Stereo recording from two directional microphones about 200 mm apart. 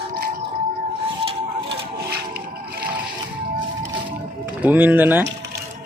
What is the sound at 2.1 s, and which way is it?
Music, 50° right (ahead or behind).